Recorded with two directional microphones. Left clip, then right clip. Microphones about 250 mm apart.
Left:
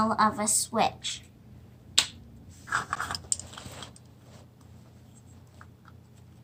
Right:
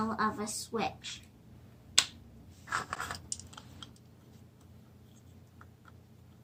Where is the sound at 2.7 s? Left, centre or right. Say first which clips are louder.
Left 6 dB; centre.